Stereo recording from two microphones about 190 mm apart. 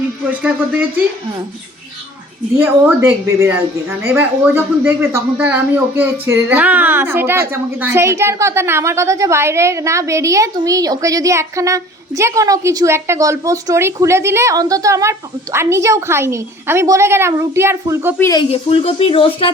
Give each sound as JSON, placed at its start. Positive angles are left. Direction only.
{"t": 0.3, "sound": "a woman's voice", "side_deg": -10}
{"t": 2.6, "sound": "a woman's voice", "side_deg": -15}
{"t": 18.2, "sound": "speech", "side_deg": 20}
{"t": 18.5, "sound": "speech", "side_deg": 30}